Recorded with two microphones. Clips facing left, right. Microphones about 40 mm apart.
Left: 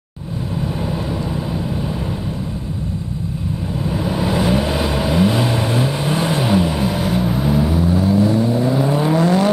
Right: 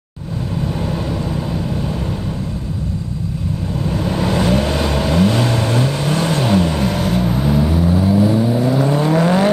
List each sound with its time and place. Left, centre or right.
3.9 s vehicle: centre
9.1 s vehicle: right